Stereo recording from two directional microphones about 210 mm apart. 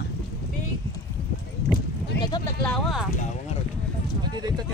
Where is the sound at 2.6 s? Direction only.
5° left (ahead or behind).